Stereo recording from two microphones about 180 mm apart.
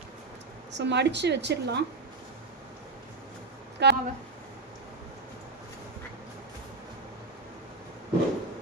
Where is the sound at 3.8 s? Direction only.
70° right (ahead or behind).